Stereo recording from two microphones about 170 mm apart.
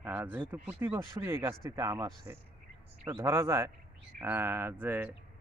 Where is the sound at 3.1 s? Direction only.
15° right (ahead or behind).